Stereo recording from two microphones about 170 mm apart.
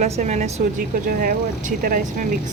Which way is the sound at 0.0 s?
40° right (ahead or behind).